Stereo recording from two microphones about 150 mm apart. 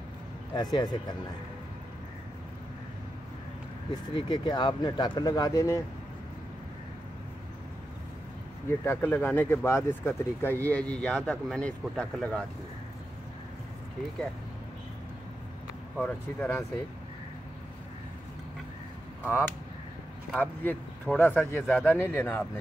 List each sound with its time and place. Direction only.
0.6 s speech: 30° left (ahead or behind)
3.9 s speech: 30° left (ahead or behind)
8.6 s speech: 15° left (ahead or behind)
16.0 s speech: 15° left (ahead or behind)
20.2 s speech: 10° left (ahead or behind)